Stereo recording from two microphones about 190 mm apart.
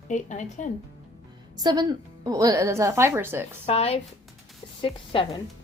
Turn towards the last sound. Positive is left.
turn(degrees=25)  # may be behind; listen again after turning